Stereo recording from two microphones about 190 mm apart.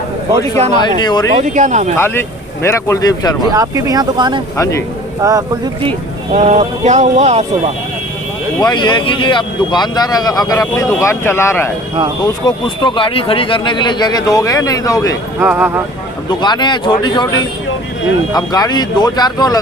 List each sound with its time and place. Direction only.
0.7 s speech: 20° left (ahead or behind)
1.4 s speech: 40° right (ahead or behind)
2.0 s speech: 10° left (ahead or behind)
3.5 s speech: 20° right (ahead or behind)
4.5 s speech: 15° left (ahead or behind)
5.2 s speech: 15° right (ahead or behind)
6.3 s speech: 35° right (ahead or behind)
8.6 s speech: 25° left (ahead or behind)
15.4 s speech: 10° right (ahead or behind)
16.4 s speech: 25° left (ahead or behind)
18.3 s speech: 20° left (ahead or behind)